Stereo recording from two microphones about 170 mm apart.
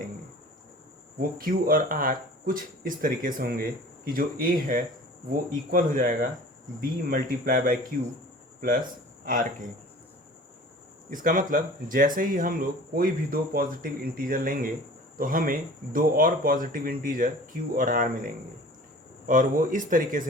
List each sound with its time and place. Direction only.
1.2 s speech: 55° right (ahead or behind)
9.2 s speech: 55° right (ahead or behind)
11.1 s speech: 50° right (ahead or behind)
19.3 s speech: 50° right (ahead or behind)